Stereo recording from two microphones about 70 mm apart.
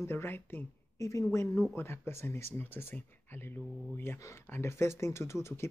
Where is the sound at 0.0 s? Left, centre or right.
Left.